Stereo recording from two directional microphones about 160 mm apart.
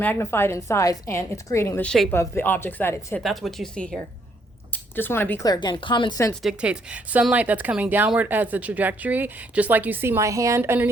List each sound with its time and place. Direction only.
0.0 s a woman's voice: 15° left (ahead or behind)
3.2 s speech: centre (ahead or behind)
5.5 s speech: 30° left (ahead or behind)
6.4 s speech: 5° right (ahead or behind)